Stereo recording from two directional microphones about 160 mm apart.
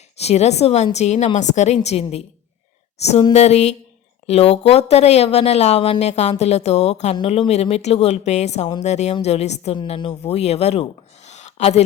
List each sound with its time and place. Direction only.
0.2 s speech: 40° left (ahead or behind)
3.3 s speech: 45° left (ahead or behind)